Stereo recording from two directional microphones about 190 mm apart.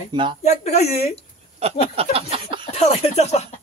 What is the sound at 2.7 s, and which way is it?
Speech, 35° left (ahead or behind).